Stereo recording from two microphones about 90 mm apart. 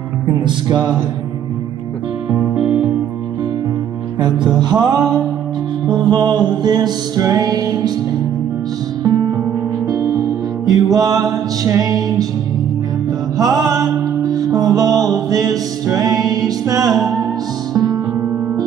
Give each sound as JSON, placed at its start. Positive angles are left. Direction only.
{"t": 0.4, "sound": "music", "side_deg": -55}
{"t": 2.5, "sound": "music", "side_deg": -5}
{"t": 4.2, "sound": "music", "side_deg": -55}
{"t": 9.0, "sound": "music", "side_deg": -45}
{"t": 13.4, "sound": "music", "side_deg": -45}